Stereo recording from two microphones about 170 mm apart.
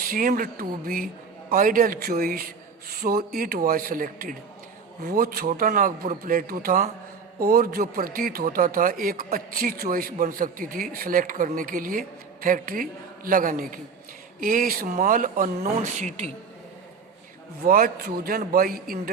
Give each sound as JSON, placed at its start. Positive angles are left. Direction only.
{"t": 0.1, "sound": "speech", "side_deg": -55}
{"t": 17.7, "sound": "speech", "side_deg": -60}